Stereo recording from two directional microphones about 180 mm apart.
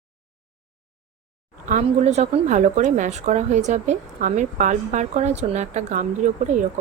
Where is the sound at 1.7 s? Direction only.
40° right (ahead or behind).